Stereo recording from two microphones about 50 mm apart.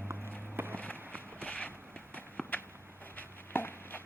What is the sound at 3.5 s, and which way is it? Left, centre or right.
Chopping, left.